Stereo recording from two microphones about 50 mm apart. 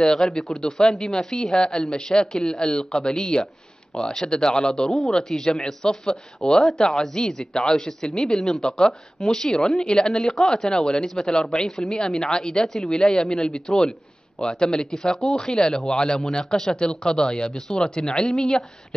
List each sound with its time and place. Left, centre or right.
0.0 s a man's voice: centre